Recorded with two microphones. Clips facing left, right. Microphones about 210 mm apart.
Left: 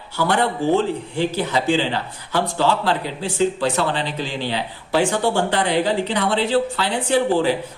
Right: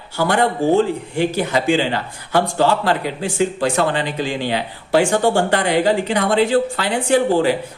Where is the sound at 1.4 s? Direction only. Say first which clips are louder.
Right 2 dB; 50° right (ahead or behind).